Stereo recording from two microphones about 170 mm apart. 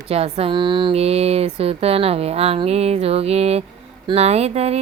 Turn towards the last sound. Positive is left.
turn(degrees=-40)  # may be behind; listen again after turning